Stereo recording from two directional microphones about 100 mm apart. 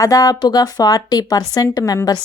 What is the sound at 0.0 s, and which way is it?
A woman's voice, 35° left (ahead or behind).